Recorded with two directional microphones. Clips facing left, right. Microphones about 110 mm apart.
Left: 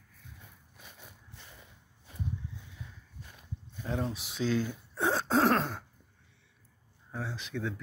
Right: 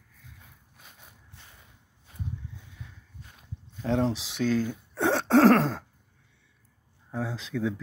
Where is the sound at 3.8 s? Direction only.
85° right.